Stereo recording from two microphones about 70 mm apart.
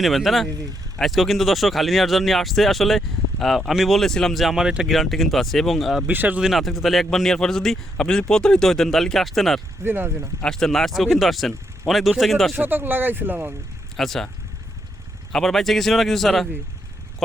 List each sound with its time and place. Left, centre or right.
0.0 s speech: centre
6.1 s speech: right
6.4 s speech: centre
9.8 s speech: right
10.4 s speech: centre
12.5 s speech: right
13.9 s speech: centre
15.3 s speech: centre